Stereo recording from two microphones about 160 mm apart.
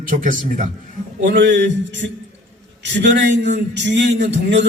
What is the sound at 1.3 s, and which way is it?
A man's voice, 90° right.